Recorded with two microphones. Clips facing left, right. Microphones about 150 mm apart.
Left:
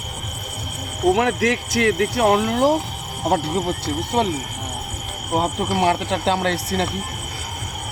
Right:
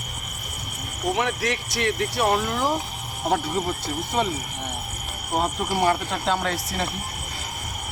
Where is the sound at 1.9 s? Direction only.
90° left; by 2.6 s 75° left (ahead or behind).